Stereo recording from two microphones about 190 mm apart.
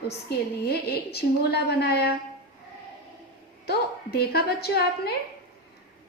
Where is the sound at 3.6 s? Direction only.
55° left (ahead or behind).